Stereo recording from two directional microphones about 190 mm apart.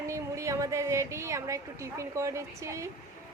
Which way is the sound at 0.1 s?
15° right (ahead or behind).